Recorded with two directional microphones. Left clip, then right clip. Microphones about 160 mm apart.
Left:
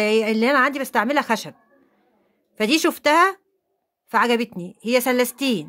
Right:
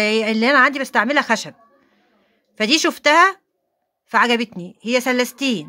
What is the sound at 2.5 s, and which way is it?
A woman's voice, 10° left (ahead or behind).